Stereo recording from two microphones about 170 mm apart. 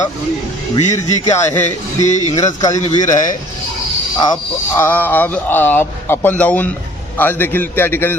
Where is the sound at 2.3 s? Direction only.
20° left (ahead or behind).